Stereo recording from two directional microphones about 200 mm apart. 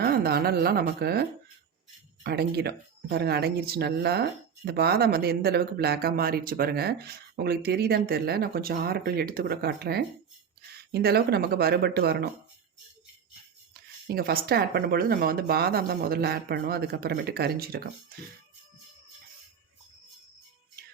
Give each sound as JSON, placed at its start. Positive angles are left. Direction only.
{"t": 0.0, "sound": "speech", "side_deg": -50}
{"t": 14.1, "sound": "speech", "side_deg": -50}